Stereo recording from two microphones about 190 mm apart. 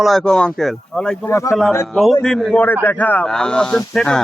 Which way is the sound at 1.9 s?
Centre (ahead or behind).